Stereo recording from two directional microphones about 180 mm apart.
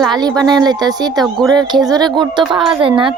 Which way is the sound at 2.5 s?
Centre (ahead or behind).